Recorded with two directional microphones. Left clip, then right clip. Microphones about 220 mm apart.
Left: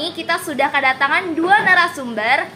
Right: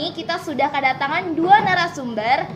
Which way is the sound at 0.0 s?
15° right (ahead or behind).